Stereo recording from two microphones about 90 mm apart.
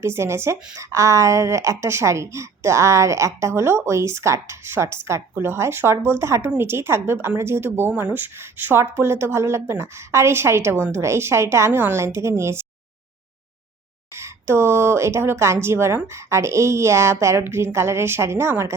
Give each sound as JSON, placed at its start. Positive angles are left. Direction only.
{"t": 0.0, "sound": "speech", "side_deg": -30}
{"t": 14.2, "sound": "speech", "side_deg": -30}